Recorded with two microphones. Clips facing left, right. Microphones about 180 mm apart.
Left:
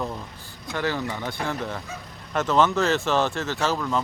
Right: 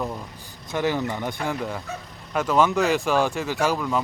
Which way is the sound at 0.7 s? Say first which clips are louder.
Right 3 dB; 15° right (ahead or behind).